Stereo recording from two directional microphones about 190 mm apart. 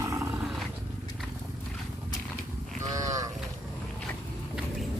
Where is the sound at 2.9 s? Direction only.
15° right (ahead or behind).